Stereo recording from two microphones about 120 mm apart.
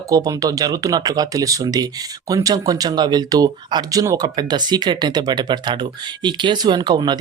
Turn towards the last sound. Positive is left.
turn(degrees=-35)  # may be behind; listen again after turning